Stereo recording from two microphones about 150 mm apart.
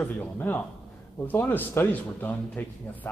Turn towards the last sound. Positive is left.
turn(degrees=10)  # may be behind; listen again after turning